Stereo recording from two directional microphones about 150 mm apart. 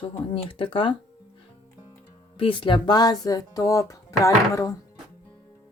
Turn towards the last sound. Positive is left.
turn(degrees=20)  # may be behind; listen again after turning